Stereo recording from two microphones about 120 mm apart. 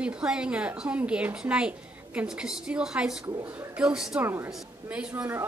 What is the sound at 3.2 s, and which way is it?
Speech, 30° right (ahead or behind).